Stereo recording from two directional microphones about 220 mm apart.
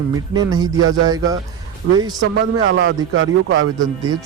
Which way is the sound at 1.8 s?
70° right (ahead or behind).